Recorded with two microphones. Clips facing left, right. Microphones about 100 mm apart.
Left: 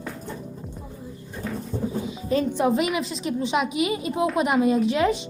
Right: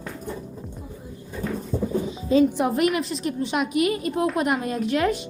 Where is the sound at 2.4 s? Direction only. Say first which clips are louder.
Right 3 dB; 10° right (ahead or behind).